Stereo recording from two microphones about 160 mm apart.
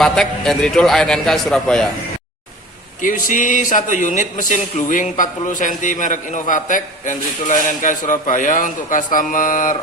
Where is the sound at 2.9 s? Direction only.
55° left (ahead or behind).